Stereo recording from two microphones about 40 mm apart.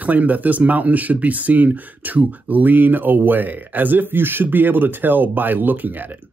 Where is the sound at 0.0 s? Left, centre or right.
Right.